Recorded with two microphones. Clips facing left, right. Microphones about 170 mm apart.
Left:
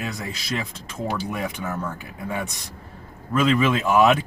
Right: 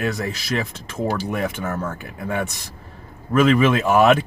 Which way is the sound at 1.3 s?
65° right (ahead or behind).